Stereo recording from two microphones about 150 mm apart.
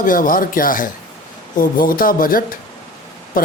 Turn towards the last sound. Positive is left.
turn(degrees=65)  # may be behind; listen again after turning